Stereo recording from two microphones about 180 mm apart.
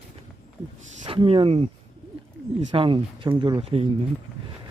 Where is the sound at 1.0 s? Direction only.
30° right (ahead or behind).